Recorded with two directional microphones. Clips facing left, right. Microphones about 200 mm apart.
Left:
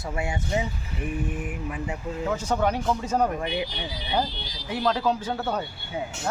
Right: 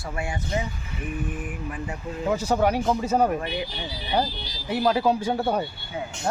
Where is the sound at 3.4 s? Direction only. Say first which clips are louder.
Left 1 dB; 15° left (ahead or behind).